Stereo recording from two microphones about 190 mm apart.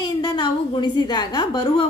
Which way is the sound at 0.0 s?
20° left (ahead or behind).